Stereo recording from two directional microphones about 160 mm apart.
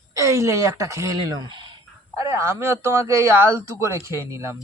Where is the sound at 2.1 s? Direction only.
20° right (ahead or behind).